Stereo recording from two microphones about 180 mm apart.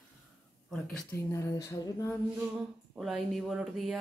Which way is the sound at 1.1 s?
15° left (ahead or behind).